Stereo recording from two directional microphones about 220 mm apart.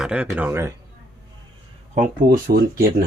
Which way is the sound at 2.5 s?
35° right (ahead or behind).